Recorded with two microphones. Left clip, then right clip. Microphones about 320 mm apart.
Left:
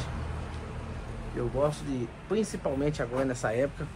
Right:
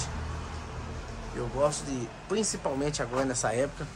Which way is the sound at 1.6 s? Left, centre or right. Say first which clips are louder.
Right 2 dB; centre.